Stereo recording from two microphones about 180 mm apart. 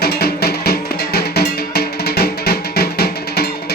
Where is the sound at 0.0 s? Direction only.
60° left (ahead or behind).